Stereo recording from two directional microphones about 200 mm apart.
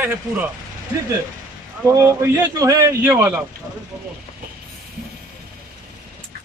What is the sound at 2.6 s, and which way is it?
Speech, 15° right (ahead or behind).